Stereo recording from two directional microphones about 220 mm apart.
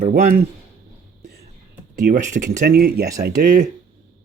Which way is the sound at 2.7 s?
45° right (ahead or behind).